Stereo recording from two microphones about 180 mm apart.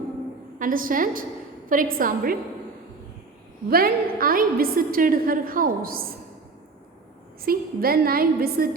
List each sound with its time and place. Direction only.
0.6 s a woman's voice: 50° right (ahead or behind)
3.7 s a woman's voice: 55° right (ahead or behind)
7.4 s a woman's voice: 55° right (ahead or behind)